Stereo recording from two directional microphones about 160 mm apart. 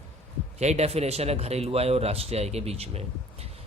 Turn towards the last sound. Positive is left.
turn(degrees=-40)  # may be behind; listen again after turning